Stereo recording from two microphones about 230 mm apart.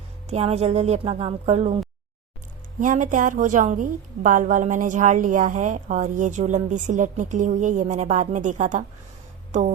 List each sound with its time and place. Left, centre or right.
0.3 s speech: right
2.8 s a woman's voice: right
9.5 s a sound: right